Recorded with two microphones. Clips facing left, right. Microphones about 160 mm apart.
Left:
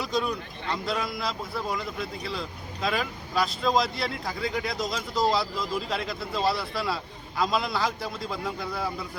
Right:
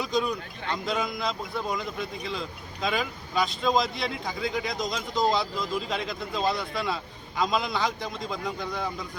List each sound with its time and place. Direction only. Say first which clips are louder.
0.0 s speech: right 1 dB; centre (ahead or behind)